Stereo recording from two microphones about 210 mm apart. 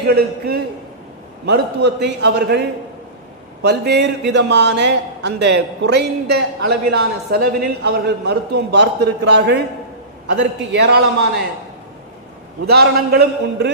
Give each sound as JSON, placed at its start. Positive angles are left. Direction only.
{"t": 0.1, "sound": "a man's voice", "side_deg": -50}
{"t": 12.6, "sound": "a man's voice", "side_deg": -50}